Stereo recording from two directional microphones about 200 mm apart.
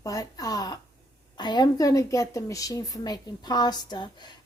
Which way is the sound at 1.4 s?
20° left (ahead or behind).